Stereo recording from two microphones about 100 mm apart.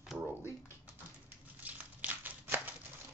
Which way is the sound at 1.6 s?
15° right (ahead or behind).